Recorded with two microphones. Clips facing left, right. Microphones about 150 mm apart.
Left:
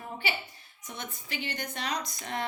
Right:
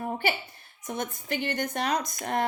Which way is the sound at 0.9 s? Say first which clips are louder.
Right 9 dB; 50° right (ahead or behind).